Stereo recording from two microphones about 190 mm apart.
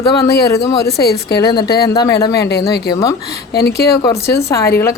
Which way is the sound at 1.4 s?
25° left (ahead or behind).